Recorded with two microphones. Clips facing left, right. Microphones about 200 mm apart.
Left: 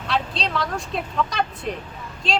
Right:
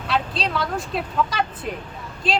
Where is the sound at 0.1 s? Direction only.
Centre (ahead or behind).